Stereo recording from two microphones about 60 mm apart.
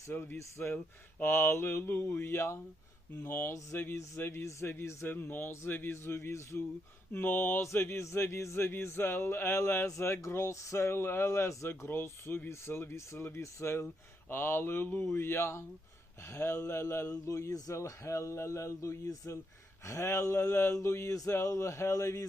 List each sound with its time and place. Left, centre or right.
0.1 s speech: left
1.2 s speech: left
5.0 s speech: left
7.1 s speech: left
7.6 s speech: left
13.8 s a man's voice: left